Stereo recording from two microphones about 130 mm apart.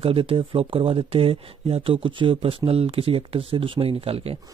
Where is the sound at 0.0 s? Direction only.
45° right (ahead or behind).